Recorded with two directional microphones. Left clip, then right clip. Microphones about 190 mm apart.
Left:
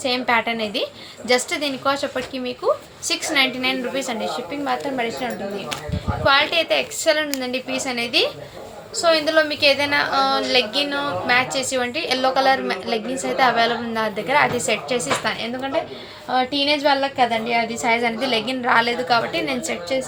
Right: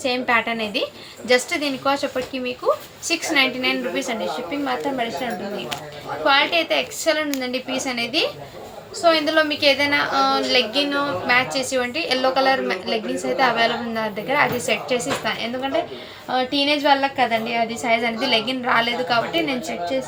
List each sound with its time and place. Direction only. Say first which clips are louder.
0.0 s a woman's voice: even; 15° left (ahead or behind)